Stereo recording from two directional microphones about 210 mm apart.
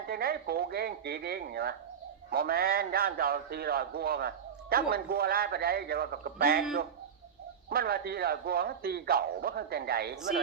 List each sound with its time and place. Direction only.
0.1 s a man's voice: 45° right (ahead or behind)
7.7 s a man's voice: 45° right (ahead or behind)